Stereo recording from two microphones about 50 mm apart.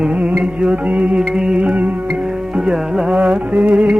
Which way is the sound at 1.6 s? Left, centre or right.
Right.